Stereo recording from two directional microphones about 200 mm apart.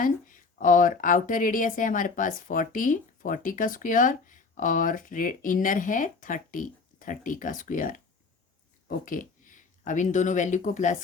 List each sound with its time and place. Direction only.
0.0 s speech: 40° left (ahead or behind)